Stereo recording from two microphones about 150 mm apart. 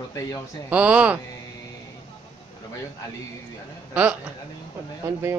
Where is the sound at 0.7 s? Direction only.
10° right (ahead or behind).